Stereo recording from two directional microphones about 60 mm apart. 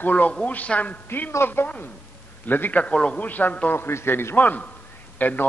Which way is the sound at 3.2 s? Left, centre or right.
Left.